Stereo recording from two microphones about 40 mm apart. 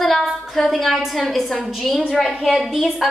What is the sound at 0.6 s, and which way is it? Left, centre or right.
A woman's voice, centre.